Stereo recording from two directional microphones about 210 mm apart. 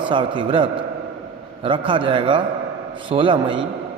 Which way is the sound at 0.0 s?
25° right (ahead or behind).